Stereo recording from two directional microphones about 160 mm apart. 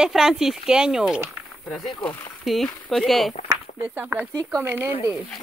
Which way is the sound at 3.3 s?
45° left (ahead or behind).